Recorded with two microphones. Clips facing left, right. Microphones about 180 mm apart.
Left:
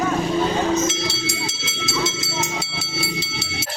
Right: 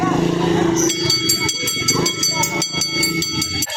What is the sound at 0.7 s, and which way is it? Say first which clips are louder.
Train: right 4 dB; 75° right (ahead or behind).